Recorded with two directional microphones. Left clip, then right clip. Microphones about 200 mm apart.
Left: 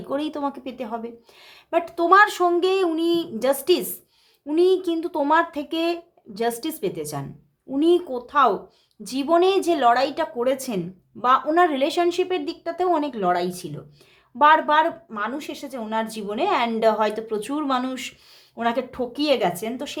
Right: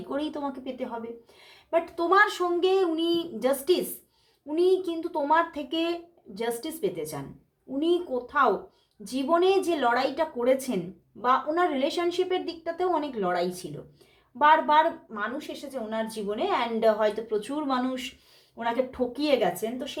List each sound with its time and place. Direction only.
0.1 s a woman's voice: 30° left (ahead or behind)